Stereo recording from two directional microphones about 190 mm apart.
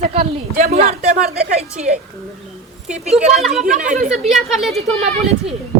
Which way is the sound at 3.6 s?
45° right (ahead or behind).